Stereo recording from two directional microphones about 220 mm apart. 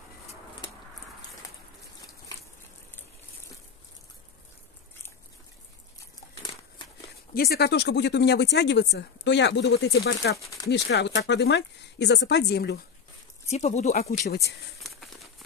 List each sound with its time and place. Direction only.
7.3 s speech: 45° left (ahead or behind)
10.4 s a sound: 15° left (ahead or behind)
10.7 s speech: 50° left (ahead or behind)
13.5 s speech: 30° left (ahead or behind)
14.2 s speech: 50° left (ahead or behind)
14.8 s crumpling: centre (ahead or behind)